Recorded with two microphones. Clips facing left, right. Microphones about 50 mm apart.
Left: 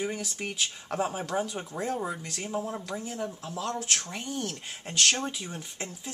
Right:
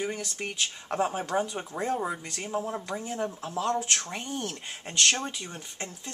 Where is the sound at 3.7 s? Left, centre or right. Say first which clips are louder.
Right 3 dB; centre.